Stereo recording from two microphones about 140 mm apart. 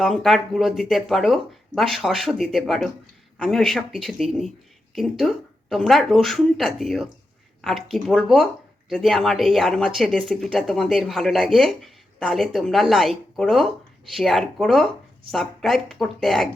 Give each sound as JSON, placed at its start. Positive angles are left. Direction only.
{"t": 0.0, "sound": "speech", "side_deg": 0}